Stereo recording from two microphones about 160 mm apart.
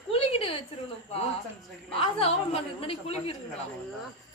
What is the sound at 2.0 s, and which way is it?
Speech, 35° left (ahead or behind).